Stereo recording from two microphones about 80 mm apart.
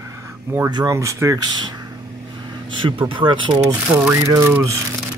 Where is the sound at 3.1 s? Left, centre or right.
Right.